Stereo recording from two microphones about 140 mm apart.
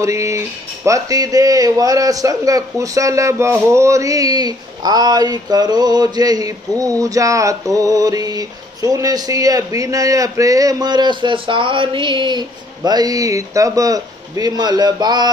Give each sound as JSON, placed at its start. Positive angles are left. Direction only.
{"t": 0.0, "sound": "a man's voice", "side_deg": -20}